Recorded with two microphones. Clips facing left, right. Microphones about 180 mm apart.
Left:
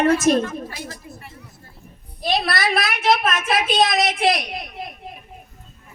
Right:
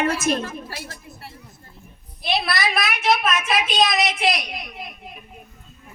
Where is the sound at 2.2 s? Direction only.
40° left (ahead or behind).